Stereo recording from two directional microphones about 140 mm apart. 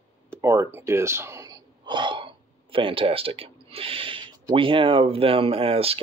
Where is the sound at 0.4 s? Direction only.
20° right (ahead or behind).